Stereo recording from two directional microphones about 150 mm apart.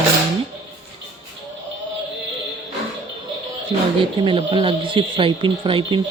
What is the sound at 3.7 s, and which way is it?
Speech, 25° right (ahead or behind).